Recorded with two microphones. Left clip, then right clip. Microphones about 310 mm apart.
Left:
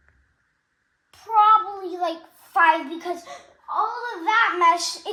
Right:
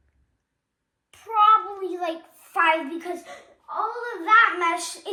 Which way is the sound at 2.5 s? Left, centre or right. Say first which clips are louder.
Left 3 dB; centre.